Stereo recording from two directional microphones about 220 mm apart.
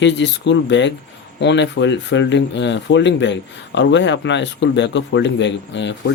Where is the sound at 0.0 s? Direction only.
55° left (ahead or behind).